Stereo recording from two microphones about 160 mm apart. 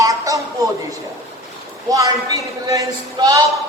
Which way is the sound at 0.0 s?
20° right (ahead or behind).